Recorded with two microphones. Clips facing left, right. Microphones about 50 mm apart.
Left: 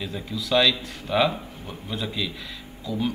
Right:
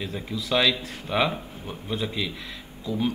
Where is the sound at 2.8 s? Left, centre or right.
Right.